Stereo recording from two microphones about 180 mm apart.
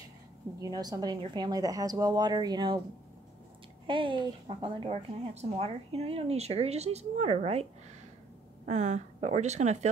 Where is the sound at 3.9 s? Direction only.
30° right (ahead or behind).